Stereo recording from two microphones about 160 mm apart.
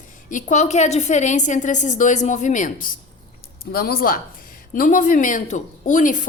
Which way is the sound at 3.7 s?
70° left (ahead or behind).